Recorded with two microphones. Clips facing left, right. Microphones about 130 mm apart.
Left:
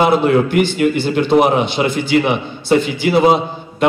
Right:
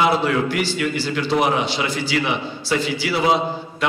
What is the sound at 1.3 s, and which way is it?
Speech, 20° left (ahead or behind).